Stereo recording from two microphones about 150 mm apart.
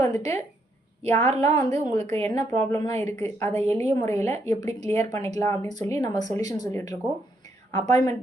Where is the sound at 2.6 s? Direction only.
20° left (ahead or behind).